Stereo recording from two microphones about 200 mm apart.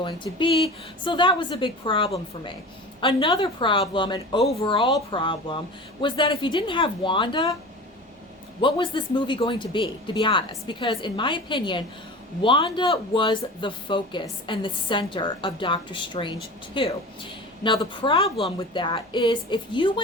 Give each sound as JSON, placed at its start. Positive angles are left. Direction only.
{"t": 0.0, "sound": "speech", "side_deg": 25}
{"t": 8.6, "sound": "speech", "side_deg": 25}